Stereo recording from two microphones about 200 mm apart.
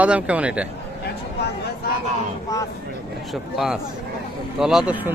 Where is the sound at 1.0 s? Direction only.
55° left (ahead or behind).